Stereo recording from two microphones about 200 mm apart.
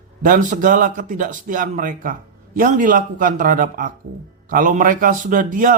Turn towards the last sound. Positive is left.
turn(degrees=-40)  # may be behind; listen again after turning